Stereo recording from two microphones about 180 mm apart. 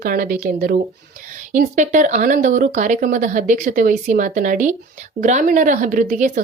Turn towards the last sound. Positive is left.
turn(degrees=-45)  # may be behind; listen again after turning